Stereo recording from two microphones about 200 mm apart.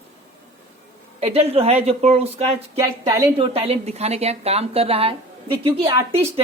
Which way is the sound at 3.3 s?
30° right (ahead or behind).